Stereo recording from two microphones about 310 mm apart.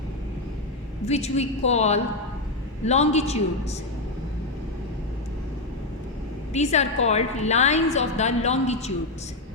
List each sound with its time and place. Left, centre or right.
1.0 s a woman's voice: left
6.5 s a woman's voice: left